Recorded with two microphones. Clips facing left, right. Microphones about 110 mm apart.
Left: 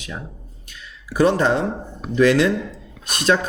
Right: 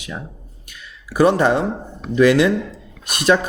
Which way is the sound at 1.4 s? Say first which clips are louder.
Right 2 dB; 60° right (ahead or behind).